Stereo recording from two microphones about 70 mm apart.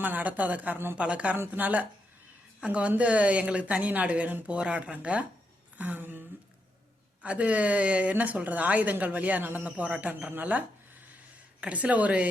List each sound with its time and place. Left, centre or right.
0.0 s a woman's voice: right
11.6 s a woman's voice: centre